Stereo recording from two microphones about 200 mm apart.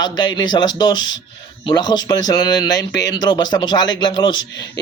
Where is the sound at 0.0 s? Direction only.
20° left (ahead or behind).